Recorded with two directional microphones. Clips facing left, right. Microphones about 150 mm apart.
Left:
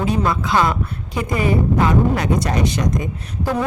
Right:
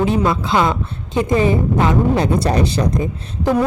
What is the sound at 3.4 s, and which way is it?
Speech, 15° right (ahead or behind).